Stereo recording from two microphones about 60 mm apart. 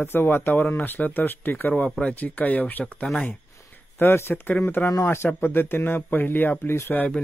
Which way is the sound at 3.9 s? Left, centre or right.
Left.